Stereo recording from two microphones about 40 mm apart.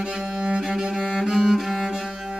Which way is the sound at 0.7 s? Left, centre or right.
Centre.